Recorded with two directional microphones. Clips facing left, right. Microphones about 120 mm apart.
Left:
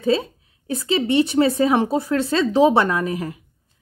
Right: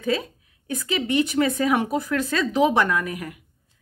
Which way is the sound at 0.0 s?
30° left (ahead or behind).